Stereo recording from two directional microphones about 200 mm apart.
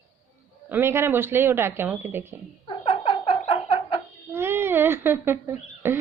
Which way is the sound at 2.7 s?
25° left (ahead or behind).